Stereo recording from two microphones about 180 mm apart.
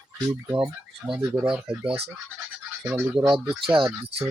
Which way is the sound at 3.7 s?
30° right (ahead or behind).